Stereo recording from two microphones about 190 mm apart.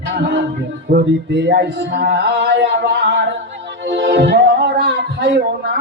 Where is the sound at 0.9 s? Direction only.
60° right (ahead or behind).